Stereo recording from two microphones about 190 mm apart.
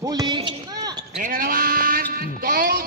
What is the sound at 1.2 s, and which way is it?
Bleat, 45° right (ahead or behind).